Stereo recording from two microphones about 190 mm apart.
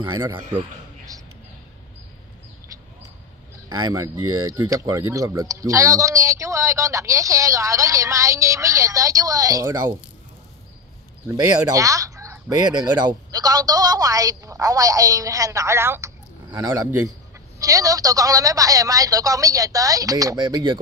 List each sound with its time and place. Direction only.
0.0 s a woman's voice: 20° right (ahead or behind)
3.6 s speech: 20° right (ahead or behind)
11.2 s a woman's voice: 15° right (ahead or behind)